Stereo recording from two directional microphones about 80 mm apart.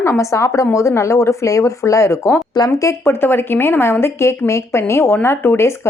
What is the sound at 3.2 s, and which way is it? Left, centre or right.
A woman's voice, left.